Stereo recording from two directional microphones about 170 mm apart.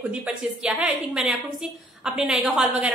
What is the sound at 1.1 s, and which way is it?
A woman's voice, 5° right (ahead or behind).